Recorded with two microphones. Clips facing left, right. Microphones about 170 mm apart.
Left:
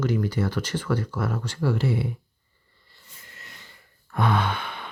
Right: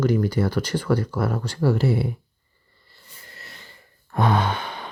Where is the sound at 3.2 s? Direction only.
35° right (ahead or behind).